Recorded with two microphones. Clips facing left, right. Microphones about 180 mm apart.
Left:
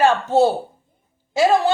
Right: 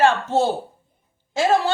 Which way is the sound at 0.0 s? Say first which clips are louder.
Left 2 dB; 10° left (ahead or behind).